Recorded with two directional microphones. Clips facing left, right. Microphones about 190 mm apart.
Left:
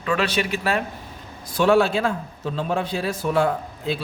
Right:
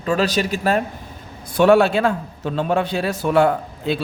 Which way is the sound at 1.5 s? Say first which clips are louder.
Right 4 dB; 60° right (ahead or behind).